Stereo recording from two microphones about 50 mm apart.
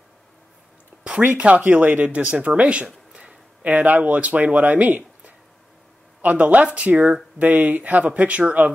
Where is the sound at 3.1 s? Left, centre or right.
Centre.